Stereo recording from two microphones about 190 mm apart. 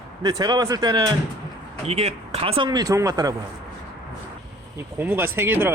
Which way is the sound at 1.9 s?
35° right (ahead or behind).